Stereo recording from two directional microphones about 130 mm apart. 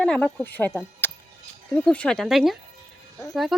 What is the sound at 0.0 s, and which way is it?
Speech, 5° left (ahead or behind).